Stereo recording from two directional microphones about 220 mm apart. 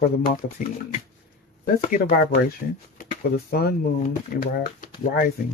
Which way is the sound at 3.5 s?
45° left (ahead or behind).